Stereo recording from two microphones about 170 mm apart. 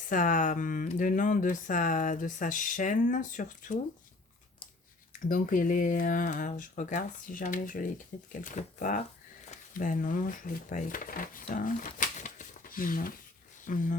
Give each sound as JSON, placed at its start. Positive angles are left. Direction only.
{"t": 0.0, "sound": "speech", "side_deg": 50}
{"t": 5.3, "sound": "speech", "side_deg": 50}